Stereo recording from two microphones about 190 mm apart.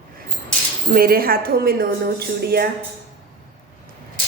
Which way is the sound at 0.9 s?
50° right (ahead or behind).